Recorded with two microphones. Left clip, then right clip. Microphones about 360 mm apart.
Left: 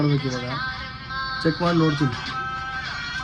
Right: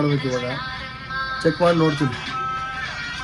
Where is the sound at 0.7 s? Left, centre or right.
Left.